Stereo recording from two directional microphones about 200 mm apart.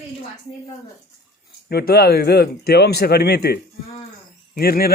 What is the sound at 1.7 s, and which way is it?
Speech, 55° left (ahead or behind).